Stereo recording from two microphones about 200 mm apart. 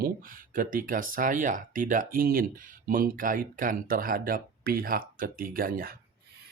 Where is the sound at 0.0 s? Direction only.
45° right (ahead or behind).